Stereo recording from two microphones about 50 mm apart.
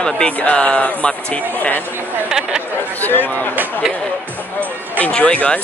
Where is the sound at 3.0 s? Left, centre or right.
Left.